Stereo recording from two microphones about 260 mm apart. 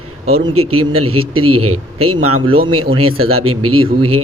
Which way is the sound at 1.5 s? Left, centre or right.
Right.